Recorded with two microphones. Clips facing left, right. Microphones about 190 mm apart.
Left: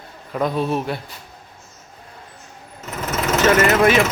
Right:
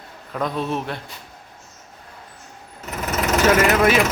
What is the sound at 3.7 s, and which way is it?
Speech, 5° right (ahead or behind).